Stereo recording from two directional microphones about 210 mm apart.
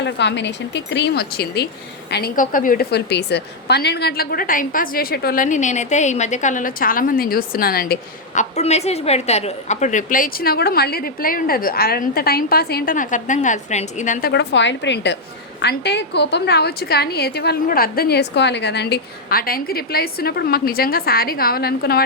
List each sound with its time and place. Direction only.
0.0 s a woman's voice: 55° left (ahead or behind)
8.4 s a woman's voice: 30° left (ahead or behind); by 22.0 s 50° left (ahead or behind)